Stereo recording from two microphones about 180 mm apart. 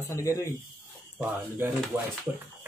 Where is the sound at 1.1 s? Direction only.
10° right (ahead or behind).